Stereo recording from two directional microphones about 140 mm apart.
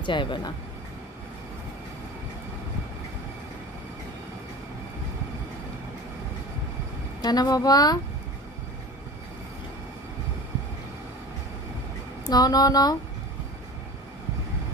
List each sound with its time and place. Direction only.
0.0 s speech: 35° left (ahead or behind)
7.2 s speech: 30° left (ahead or behind)
12.3 s speech: 25° left (ahead or behind)